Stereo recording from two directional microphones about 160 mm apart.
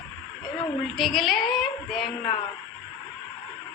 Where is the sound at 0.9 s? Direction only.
Centre (ahead or behind).